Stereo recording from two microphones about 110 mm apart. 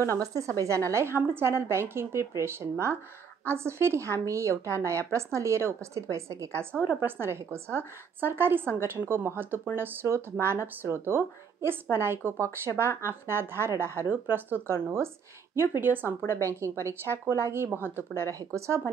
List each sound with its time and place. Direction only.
0.2 s a woman's voice: 30° right (ahead or behind)